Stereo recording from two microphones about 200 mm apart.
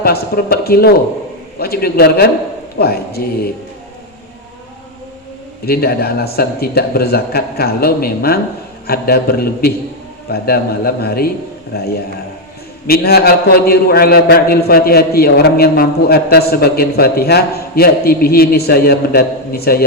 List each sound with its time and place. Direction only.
0.0 s a man's voice: 50° left (ahead or behind)
5.6 s a man's voice: 50° left (ahead or behind)